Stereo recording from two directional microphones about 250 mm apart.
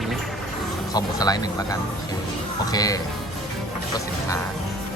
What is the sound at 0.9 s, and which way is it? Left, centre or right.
Speech, centre.